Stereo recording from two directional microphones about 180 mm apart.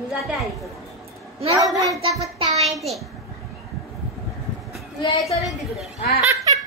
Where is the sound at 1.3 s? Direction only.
35° right (ahead or behind).